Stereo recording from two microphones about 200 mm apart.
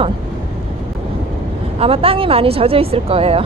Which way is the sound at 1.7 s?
30° right (ahead or behind).